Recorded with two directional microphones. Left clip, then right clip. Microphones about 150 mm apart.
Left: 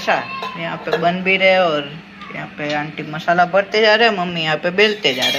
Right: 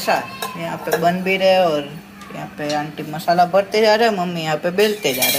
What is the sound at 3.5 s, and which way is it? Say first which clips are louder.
Dishes: left 1 dB; 25° right (ahead or behind).